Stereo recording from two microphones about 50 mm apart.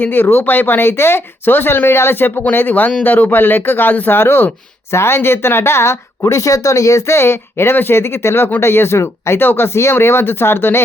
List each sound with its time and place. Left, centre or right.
0.0 s speech: left
9.4 s speech: left